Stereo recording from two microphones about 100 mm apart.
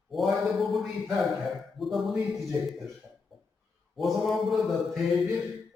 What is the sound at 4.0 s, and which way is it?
Mantra, centre (ahead or behind).